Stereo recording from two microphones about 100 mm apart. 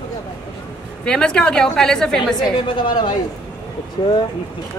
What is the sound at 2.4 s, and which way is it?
Speech, 50° left (ahead or behind).